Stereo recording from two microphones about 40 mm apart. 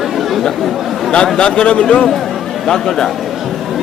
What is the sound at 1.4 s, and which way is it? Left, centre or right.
Speech, left.